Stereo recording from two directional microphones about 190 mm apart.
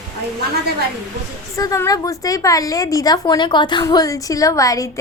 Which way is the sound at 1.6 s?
15° left (ahead or behind).